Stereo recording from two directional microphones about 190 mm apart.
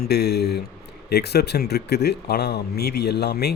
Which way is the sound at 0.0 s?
55° left (ahead or behind).